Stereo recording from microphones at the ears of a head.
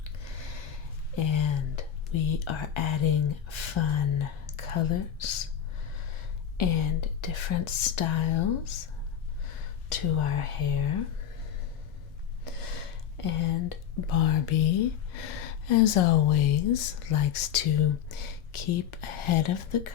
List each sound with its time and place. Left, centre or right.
1.1 s speech: left
12.5 s speech: left